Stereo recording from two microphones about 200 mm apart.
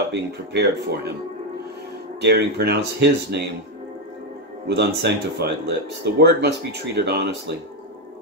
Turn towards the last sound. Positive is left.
turn(degrees=-55)  # may be behind; listen again after turning